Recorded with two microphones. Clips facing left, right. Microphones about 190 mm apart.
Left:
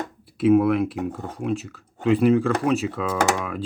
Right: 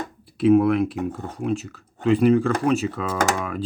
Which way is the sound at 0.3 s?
5° left (ahead or behind).